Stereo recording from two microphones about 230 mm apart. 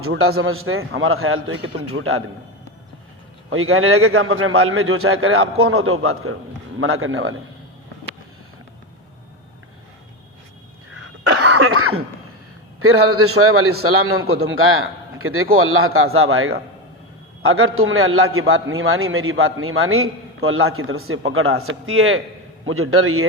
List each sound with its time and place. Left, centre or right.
0.0 s a man's voice: right
3.5 s a man's voice: right
10.9 s cough: right
12.8 s a man's voice: right